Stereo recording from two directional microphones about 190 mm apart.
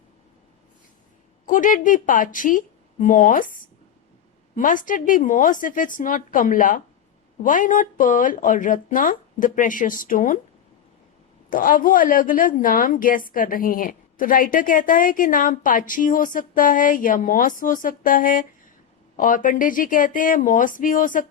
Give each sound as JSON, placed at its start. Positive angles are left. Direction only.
{"t": 1.5, "sound": "a woman's voice", "side_deg": 45}
{"t": 11.4, "sound": "a woman's voice", "side_deg": 45}